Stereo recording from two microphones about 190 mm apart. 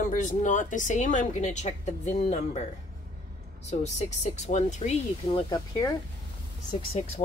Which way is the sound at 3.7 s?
35° left (ahead or behind).